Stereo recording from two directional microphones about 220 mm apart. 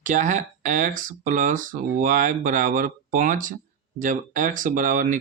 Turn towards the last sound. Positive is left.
turn(degrees=-35)  # may be behind; listen again after turning